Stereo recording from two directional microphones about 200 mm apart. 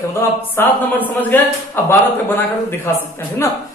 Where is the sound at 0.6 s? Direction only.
10° left (ahead or behind).